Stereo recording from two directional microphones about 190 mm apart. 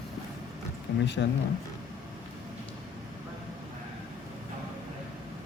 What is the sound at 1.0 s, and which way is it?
Speech, 70° left (ahead or behind).